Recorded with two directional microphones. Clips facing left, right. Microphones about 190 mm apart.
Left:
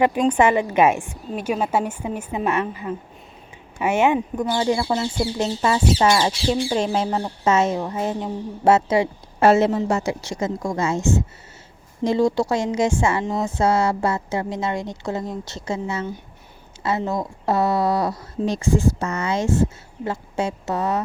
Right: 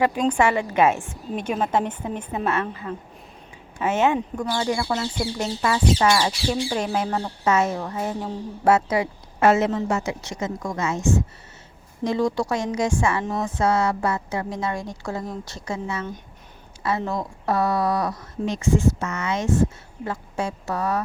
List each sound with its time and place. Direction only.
0.3 s a woman's voice: 20° left (ahead or behind)